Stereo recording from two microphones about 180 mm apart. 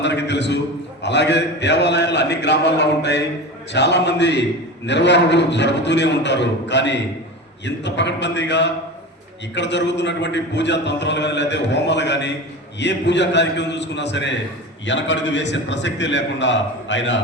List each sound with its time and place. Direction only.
0.0 s a man's voice: 75° left (ahead or behind); by 17.2 s 90° left